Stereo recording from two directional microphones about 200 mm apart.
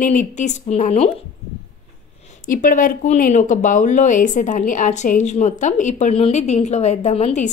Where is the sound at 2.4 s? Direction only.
40° left (ahead or behind).